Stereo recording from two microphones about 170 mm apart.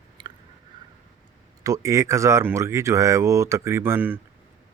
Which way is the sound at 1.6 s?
20° right (ahead or behind).